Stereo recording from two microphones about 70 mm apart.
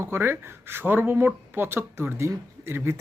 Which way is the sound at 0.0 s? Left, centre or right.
Right.